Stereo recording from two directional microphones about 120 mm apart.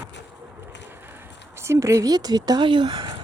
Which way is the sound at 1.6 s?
25° right (ahead or behind).